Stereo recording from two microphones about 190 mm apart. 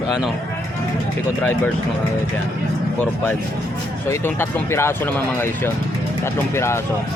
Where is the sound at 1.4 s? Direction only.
10° left (ahead or behind).